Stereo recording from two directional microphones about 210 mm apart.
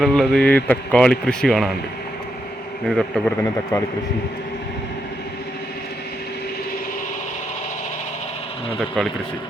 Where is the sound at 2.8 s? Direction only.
5° left (ahead or behind).